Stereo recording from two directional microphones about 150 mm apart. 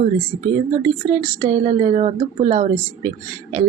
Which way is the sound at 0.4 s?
35° right (ahead or behind).